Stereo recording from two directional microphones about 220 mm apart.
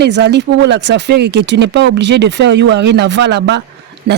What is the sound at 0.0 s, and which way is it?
Speech, 50° right (ahead or behind).